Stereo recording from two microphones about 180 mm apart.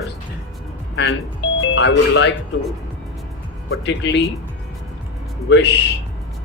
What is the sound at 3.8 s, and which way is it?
Speech, 75° left (ahead or behind).